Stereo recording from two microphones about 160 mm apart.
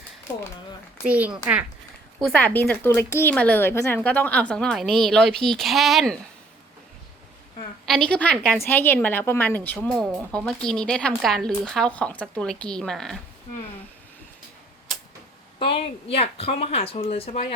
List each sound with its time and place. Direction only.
1.0 s a woman's voice: 10° right (ahead or behind)
2.2 s speech: 10° left (ahead or behind)
7.9 s speech: 5° left (ahead or behind)
15.5 s speech: 35° left (ahead or behind)